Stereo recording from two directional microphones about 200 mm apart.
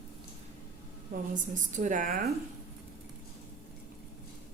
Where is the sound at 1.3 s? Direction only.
40° right (ahead or behind).